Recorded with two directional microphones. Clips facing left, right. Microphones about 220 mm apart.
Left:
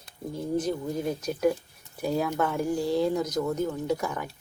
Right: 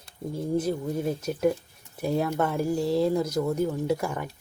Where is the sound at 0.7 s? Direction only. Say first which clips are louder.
Right 1 dB; 5° right (ahead or behind).